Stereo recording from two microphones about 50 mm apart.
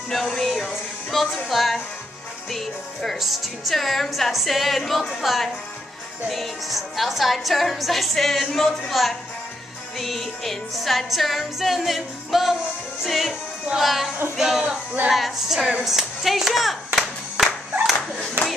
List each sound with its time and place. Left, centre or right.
0.1 s music: centre
15.0 s speech: centre
18.4 s a sound: right